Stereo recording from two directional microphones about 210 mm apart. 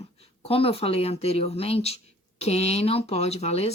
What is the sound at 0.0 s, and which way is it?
A woman's voice, 30° left (ahead or behind).